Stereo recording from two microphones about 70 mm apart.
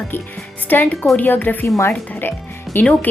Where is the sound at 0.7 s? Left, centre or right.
Left.